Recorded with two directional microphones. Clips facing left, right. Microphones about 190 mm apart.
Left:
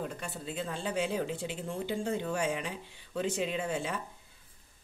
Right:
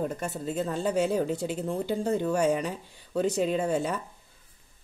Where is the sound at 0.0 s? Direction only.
45° right (ahead or behind).